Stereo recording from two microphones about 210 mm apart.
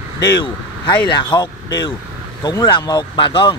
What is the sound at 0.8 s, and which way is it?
Speech, 20° left (ahead or behind).